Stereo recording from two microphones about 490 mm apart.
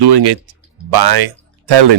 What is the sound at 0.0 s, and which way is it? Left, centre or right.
Speech, right.